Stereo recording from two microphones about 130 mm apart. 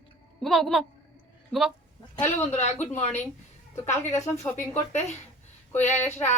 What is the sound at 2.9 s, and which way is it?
Speech, 60° left (ahead or behind).